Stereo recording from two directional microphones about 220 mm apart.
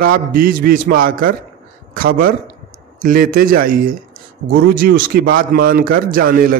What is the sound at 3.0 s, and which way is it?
A man's voice, 40° right (ahead or behind).